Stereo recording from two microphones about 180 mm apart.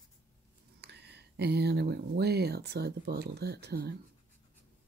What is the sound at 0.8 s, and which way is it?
Speech, 65° right (ahead or behind).